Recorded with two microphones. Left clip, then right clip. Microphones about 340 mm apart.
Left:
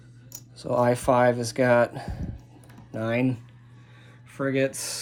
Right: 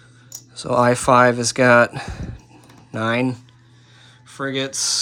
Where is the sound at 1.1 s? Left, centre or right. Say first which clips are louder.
Right 7 dB; right.